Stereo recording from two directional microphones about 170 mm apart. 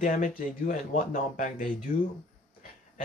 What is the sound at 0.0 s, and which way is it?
Speech, 50° left (ahead or behind).